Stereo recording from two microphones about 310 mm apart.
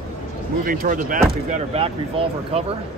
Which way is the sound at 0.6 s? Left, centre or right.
Right.